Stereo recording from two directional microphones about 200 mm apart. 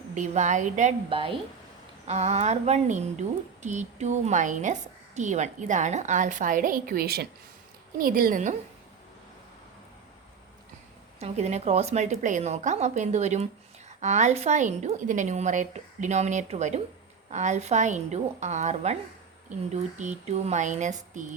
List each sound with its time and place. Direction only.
0.1 s a woman's voice: 35° right (ahead or behind)
11.2 s a woman's voice: 35° right (ahead or behind)